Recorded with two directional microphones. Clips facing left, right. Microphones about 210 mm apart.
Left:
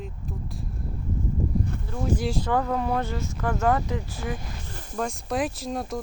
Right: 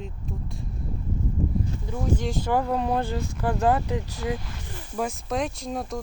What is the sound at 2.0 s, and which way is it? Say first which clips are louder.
Speech: left 1 dB; centre (ahead or behind).